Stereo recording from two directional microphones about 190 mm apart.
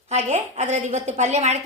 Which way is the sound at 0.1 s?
35° right (ahead or behind).